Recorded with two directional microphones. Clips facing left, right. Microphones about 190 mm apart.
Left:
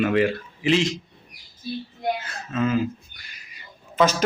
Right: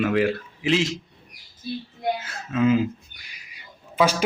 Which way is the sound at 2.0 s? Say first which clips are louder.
Even; 5° right (ahead or behind).